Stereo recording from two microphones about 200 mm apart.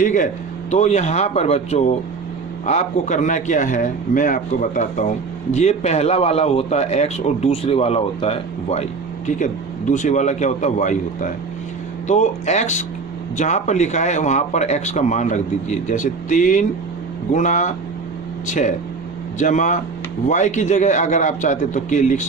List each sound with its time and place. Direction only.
0.0 s a man's voice: 40° left (ahead or behind)